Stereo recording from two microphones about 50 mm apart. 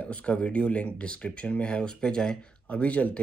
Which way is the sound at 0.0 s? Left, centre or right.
Left.